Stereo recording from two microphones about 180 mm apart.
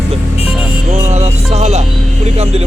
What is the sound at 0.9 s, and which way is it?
Music, 40° right (ahead or behind).